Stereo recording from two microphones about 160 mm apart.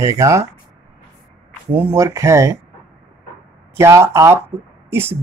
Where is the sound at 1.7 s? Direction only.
15° right (ahead or behind).